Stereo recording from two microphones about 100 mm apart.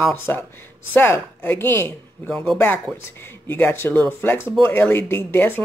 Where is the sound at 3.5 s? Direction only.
20° left (ahead or behind).